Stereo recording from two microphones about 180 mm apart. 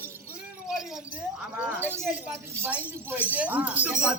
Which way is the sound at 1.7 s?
15° right (ahead or behind).